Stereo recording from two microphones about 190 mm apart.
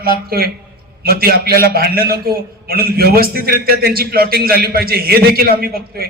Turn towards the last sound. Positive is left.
turn(degrees=-50)  # may be behind; listen again after turning